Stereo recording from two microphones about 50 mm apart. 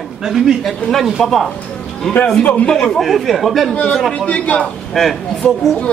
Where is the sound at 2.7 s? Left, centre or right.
Centre.